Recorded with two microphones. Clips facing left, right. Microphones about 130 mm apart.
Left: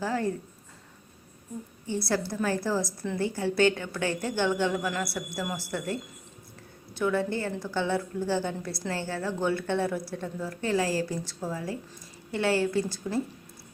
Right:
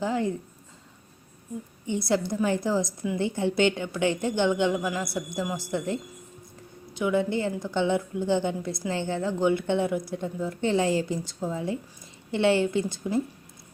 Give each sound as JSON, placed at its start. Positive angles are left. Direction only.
{"t": 0.0, "sound": "speech", "side_deg": -20}
{"t": 1.9, "sound": "a woman's voice", "side_deg": -20}